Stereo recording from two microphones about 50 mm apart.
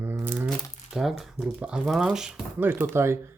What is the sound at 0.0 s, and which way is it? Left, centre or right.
Crumpling, right.